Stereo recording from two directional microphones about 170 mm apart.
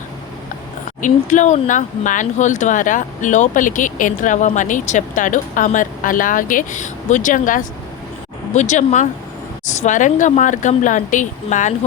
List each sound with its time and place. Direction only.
1.0 s speech: 45° left (ahead or behind)